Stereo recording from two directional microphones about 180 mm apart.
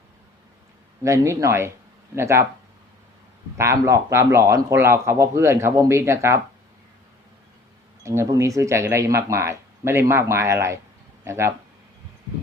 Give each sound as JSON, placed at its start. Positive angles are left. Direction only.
{"t": 1.0, "sound": "a man's voice", "side_deg": -15}
{"t": 3.6, "sound": "a man's voice", "side_deg": -15}
{"t": 8.0, "sound": "a man's voice", "side_deg": -15}